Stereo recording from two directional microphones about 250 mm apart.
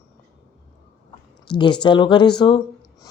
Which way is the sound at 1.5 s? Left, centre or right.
Centre.